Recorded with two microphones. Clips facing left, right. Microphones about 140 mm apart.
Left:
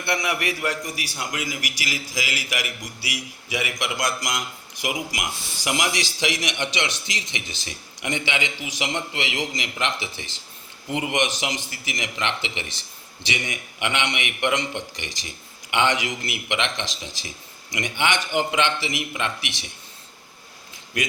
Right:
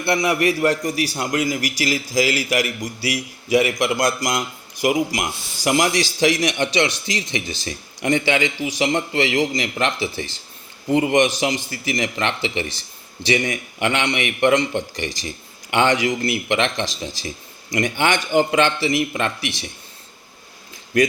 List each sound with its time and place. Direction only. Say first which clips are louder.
0.0 s a man's voice: right 7 dB; 30° right (ahead or behind)